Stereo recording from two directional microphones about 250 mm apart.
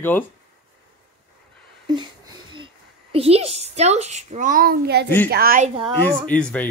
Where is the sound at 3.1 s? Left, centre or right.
Right.